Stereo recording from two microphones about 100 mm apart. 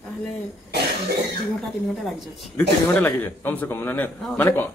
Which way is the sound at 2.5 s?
20° left (ahead or behind).